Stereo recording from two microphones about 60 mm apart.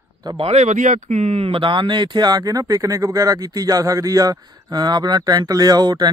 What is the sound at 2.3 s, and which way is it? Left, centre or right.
Speech, right.